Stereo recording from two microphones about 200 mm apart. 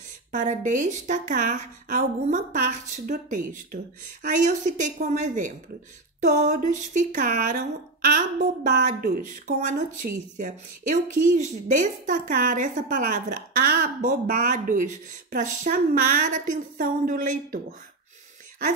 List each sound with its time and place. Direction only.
0.3 s a woman's voice: 40° right (ahead or behind)